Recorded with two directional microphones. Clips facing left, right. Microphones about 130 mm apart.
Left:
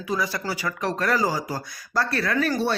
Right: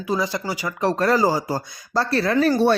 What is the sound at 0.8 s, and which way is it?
Speech, 30° right (ahead or behind).